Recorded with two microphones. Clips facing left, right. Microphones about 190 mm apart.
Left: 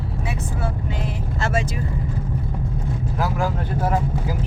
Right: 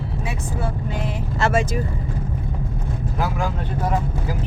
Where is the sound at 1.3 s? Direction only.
65° right (ahead or behind).